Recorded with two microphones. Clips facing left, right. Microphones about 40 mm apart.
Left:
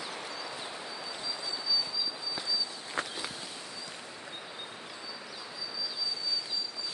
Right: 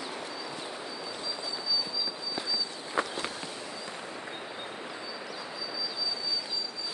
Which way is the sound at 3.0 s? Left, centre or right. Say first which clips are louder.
Right 5 dB; centre.